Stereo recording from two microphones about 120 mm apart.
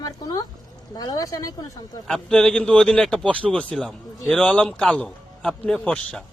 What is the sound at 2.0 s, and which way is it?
Speech, 5° left (ahead or behind).